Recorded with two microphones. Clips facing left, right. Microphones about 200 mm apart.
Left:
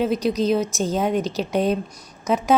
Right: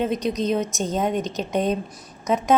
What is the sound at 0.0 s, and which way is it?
A woman's voice, 5° left (ahead or behind).